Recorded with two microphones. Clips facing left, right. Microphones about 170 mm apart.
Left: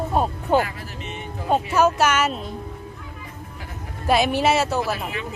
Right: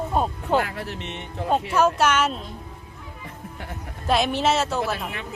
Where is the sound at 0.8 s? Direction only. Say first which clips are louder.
Right 2 dB; 70° right (ahead or behind).